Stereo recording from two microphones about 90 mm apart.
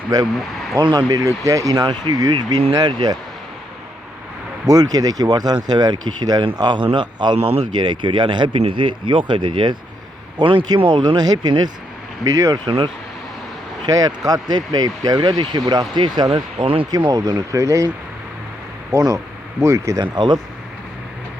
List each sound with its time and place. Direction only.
0.1 s speech: 45° right (ahead or behind)
4.6 s speech: 45° right (ahead or behind)
7.3 s speech: 90° right
7.7 s speech: 55° right (ahead or behind)
10.8 s speech: 70° right (ahead or behind); by 11.7 s 50° right (ahead or behind)
12.2 s speech: 40° right (ahead or behind)
12.6 s speech: 65° right (ahead or behind)
13.8 s speech: 45° right (ahead or behind)
16.3 s speech: 85° right
17.2 s speech: 45° right (ahead or behind)
18.9 s speech: 40° right (ahead or behind)
20.1 s speech: 55° right (ahead or behind)